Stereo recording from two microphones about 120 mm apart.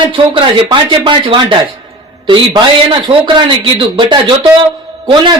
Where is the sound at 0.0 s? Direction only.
40° right (ahead or behind).